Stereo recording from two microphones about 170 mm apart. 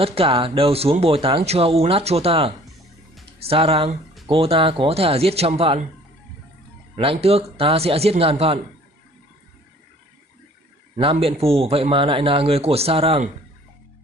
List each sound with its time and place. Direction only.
0.0 s speech: 35° right (ahead or behind)
7.0 s speech: 35° right (ahead or behind)
11.0 s speech: 35° right (ahead or behind)